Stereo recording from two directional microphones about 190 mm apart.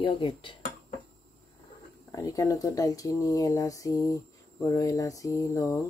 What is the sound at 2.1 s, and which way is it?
Speech, 15° left (ahead or behind).